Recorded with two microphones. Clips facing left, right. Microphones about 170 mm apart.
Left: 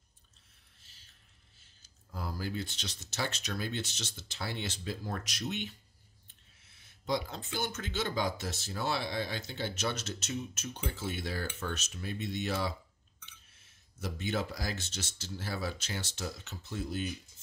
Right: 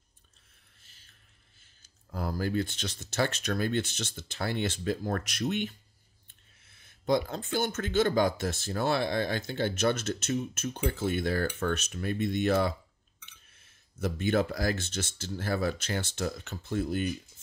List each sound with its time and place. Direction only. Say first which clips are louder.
0.8 s a sound: even; 55° right (ahead or behind)
1.8 s speech: right 6 dB; 55° right (ahead or behind)
6.7 s speech: right 7 dB; 50° right (ahead or behind)